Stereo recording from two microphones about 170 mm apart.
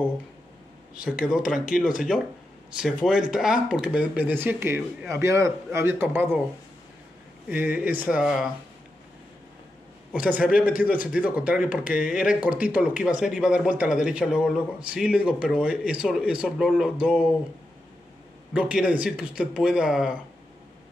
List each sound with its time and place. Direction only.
1.0 s speech: 5° right (ahead or behind)
3.1 s speech: 5° right (ahead or behind)
7.4 s speech: 10° right (ahead or behind)
10.1 s speech: 10° right (ahead or behind)
18.5 s speech: 5° right (ahead or behind)